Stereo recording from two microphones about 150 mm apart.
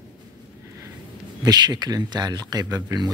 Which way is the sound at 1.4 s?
25° right (ahead or behind).